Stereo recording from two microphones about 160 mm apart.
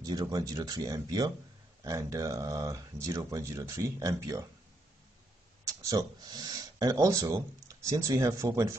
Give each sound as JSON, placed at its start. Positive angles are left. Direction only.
{"t": 0.0, "sound": "speech", "side_deg": -25}
{"t": 5.8, "sound": "speech", "side_deg": -20}